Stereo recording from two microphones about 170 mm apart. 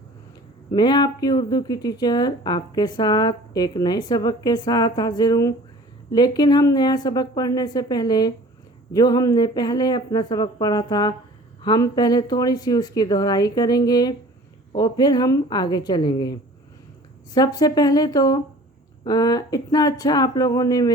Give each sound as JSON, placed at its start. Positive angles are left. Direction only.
{"t": 0.7, "sound": "speech", "side_deg": 25}
{"t": 17.3, "sound": "speech", "side_deg": 20}